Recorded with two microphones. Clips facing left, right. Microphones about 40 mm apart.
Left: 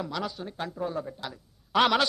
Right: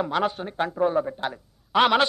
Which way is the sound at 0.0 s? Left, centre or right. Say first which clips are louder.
Right 8 dB; right.